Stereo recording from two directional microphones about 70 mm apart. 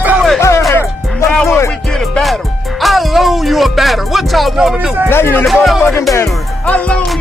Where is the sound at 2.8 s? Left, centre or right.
Centre.